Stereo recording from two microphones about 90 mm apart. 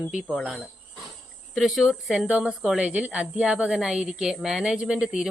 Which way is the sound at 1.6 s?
Centre (ahead or behind).